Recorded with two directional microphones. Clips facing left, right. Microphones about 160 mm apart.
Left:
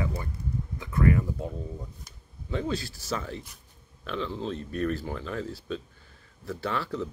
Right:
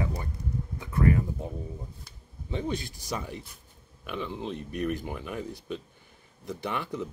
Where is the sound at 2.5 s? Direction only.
20° right (ahead or behind).